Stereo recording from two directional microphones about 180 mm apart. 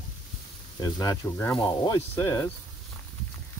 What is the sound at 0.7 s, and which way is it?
Speech, 20° left (ahead or behind).